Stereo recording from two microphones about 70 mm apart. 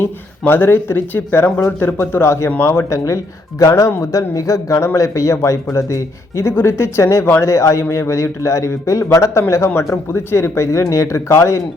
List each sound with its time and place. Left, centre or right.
0.0 s speech: left